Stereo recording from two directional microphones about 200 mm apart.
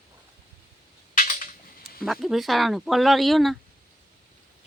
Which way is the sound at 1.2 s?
40° left (ahead or behind).